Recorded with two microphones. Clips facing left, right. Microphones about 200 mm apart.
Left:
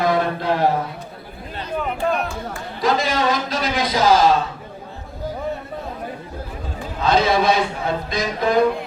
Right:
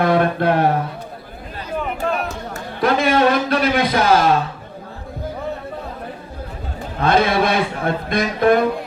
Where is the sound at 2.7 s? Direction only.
60° right (ahead or behind).